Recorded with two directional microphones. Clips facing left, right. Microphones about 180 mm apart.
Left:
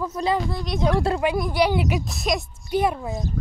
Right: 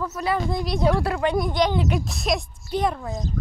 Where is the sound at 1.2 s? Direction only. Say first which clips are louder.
Right 3 dB; 5° left (ahead or behind).